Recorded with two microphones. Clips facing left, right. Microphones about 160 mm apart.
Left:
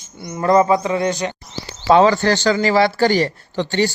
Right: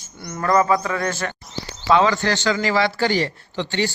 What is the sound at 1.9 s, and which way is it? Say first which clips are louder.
Speech: left 5 dB; 35° left (ahead or behind).